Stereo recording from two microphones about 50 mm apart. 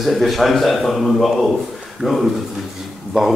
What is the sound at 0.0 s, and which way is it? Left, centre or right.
A man's voice, centre.